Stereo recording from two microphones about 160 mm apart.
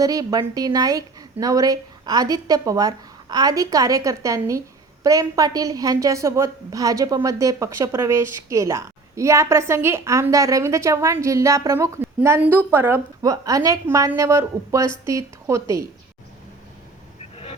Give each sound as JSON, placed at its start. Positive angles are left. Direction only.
{"t": 0.0, "sound": "a woman's voice", "side_deg": -20}
{"t": 17.3, "sound": "vehicle", "side_deg": 40}